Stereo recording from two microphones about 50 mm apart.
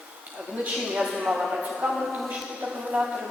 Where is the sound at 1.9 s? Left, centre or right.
Centre.